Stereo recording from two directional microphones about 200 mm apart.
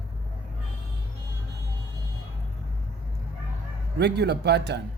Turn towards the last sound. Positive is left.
turn(degrees=-60)  # may be behind; listen again after turning